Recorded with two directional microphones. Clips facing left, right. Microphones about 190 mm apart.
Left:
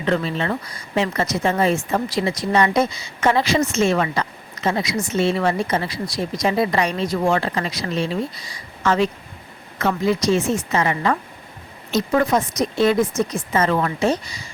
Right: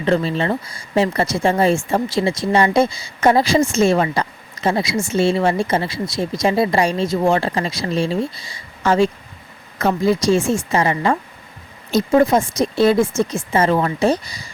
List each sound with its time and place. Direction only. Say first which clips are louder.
0.0 s a woman's voice: right 3 dB; 35° right (ahead or behind)